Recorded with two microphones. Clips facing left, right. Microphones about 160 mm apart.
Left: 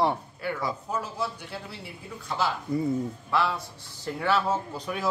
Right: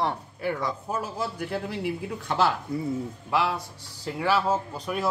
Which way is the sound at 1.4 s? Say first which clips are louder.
Right 9 dB; 90° right.